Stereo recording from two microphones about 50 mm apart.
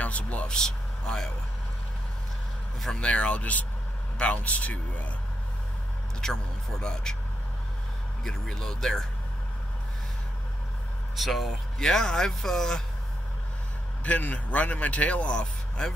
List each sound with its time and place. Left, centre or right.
0.0 s speech: left
0.5 s speech: centre
2.9 s a man's voice: left
6.2 s speech: centre
8.2 s speech: centre
11.1 s speech: centre
11.8 s speech: centre
14.0 s a man's voice: left